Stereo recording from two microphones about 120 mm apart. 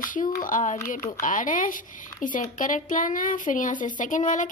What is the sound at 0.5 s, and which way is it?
Speech, 90° left.